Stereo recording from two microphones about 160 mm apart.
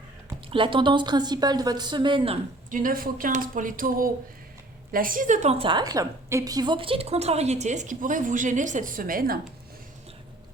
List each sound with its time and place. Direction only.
0.5 s a woman's voice: 30° right (ahead or behind)
2.6 s a woman's voice: 55° right (ahead or behind)